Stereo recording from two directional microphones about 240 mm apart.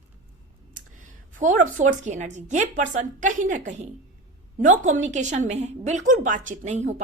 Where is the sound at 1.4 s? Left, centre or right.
Right.